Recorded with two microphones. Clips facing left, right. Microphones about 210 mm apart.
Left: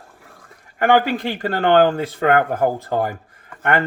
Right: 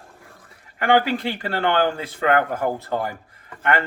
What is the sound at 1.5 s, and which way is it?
Speech, 45° left (ahead or behind).